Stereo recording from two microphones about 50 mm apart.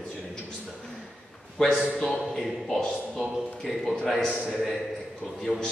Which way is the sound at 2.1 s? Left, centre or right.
Centre.